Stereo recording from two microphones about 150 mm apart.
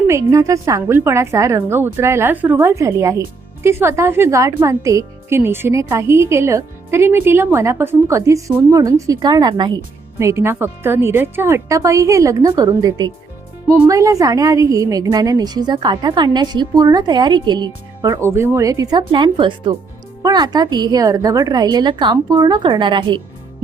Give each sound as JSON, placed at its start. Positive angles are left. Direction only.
{"t": 0.1, "sound": "a woman's voice", "side_deg": -20}
{"t": 10.2, "sound": "a woman's voice", "side_deg": -20}
{"t": 18.2, "sound": "a woman's voice", "side_deg": -15}